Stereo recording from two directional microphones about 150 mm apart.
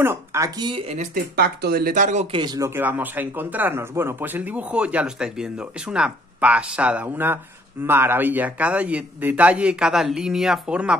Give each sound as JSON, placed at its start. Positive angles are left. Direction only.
{"t": 0.0, "sound": "speech", "side_deg": -15}
{"t": 0.7, "sound": "speech", "side_deg": -35}
{"t": 0.9, "sound": "speech", "side_deg": -80}
{"t": 2.3, "sound": "speech", "side_deg": -30}
{"t": 2.7, "sound": "speech", "side_deg": -10}